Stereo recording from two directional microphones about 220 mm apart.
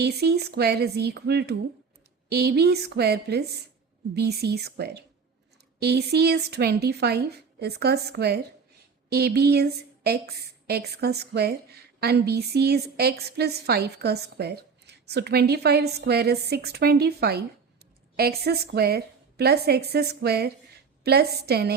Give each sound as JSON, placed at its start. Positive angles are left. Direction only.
{"t": 0.0, "sound": "a woman's voice", "side_deg": -50}